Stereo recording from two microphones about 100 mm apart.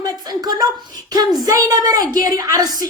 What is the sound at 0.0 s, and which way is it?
Speech, 40° right (ahead or behind).